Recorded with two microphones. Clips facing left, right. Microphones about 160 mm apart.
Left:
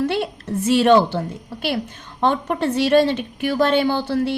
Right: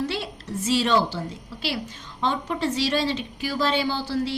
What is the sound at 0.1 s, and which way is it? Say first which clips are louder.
A woman's voice: left 7 dB; 55° left (ahead or behind).